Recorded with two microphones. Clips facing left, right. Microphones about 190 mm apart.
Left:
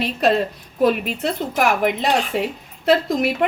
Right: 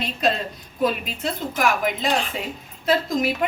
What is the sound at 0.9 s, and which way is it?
A woman's voice, 60° left (ahead or behind).